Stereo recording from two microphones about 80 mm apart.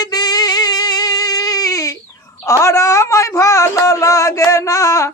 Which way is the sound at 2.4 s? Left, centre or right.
Left.